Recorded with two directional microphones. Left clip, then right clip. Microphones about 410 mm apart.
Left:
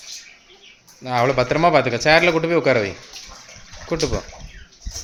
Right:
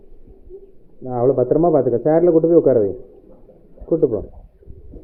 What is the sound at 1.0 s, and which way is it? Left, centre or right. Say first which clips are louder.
A man's voice: right 1 dB; left.